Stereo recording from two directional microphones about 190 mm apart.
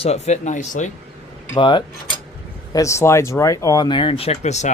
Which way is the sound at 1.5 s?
25° left (ahead or behind).